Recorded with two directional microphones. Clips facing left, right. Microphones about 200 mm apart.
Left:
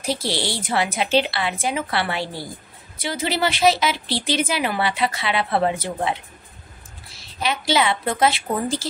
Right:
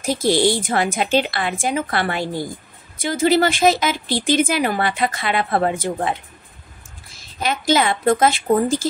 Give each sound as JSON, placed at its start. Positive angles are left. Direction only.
{"t": 0.0, "sound": "a woman's voice", "side_deg": -45}
{"t": 7.2, "sound": "a woman's voice", "side_deg": -45}